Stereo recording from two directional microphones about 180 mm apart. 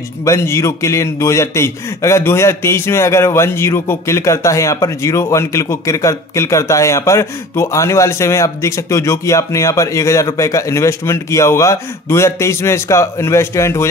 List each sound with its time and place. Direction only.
0.2 s a man's voice: 15° left (ahead or behind)